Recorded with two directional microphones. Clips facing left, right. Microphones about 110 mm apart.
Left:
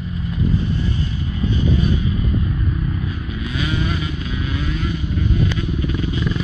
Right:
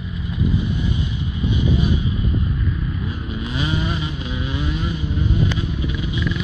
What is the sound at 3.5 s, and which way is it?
Vehicle, 25° right (ahead or behind).